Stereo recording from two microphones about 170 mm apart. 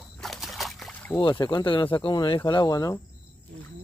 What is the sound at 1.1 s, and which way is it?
Speech, 25° left (ahead or behind).